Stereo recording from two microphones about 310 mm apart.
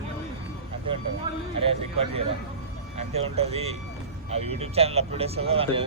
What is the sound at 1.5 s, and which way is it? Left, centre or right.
Speech, centre.